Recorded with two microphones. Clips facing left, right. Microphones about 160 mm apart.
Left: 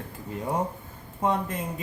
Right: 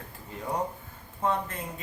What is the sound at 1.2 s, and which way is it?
Speech, 15° left (ahead or behind).